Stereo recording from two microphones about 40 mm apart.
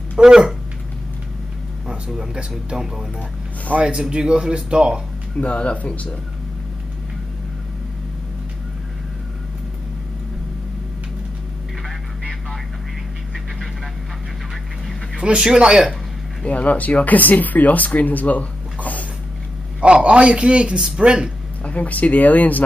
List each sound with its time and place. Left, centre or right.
0.1 s speech: centre
2.1 s speech: centre
3.7 s speech: right
4.1 s a man's voice: right
5.4 s speech: left
12.2 s vehicle: centre
15.1 s a man's voice: right
16.4 s speech: left
19.8 s a man's voice: right
21.6 s speech: left